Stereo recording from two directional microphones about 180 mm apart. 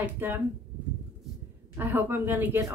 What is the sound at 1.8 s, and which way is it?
Speech, 10° right (ahead or behind).